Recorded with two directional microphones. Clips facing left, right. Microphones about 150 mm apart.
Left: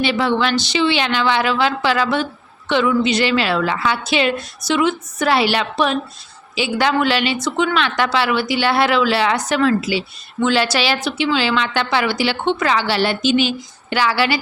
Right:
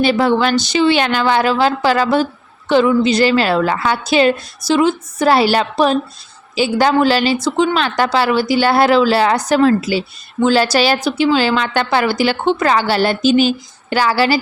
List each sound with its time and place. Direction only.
0.0 s a woman's voice: 45° right (ahead or behind)